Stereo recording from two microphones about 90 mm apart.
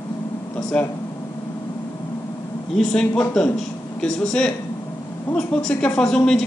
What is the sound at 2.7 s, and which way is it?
Speech, 5° left (ahead or behind).